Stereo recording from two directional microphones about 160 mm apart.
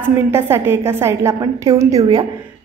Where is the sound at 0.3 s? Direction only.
15° right (ahead or behind).